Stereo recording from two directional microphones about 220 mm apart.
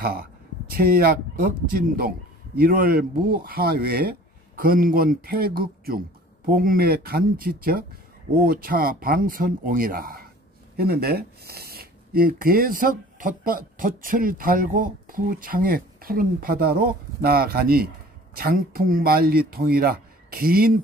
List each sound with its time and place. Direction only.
0.0 s speech: 40° right (ahead or behind)